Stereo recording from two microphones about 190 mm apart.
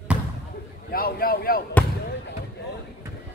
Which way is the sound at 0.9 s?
50° left (ahead or behind).